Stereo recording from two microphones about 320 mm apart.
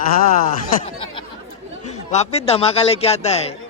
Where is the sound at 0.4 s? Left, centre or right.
Centre.